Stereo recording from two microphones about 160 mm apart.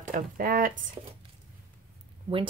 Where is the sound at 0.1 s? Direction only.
60° right (ahead or behind).